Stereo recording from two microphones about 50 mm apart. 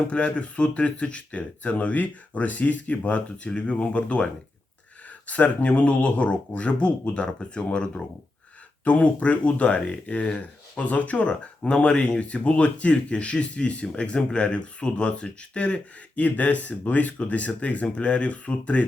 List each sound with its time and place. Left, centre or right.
0.1 s speech: left
11.6 s speech: centre